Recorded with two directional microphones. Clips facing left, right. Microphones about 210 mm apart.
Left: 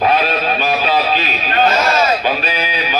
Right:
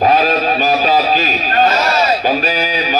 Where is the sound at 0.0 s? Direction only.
40° right (ahead or behind).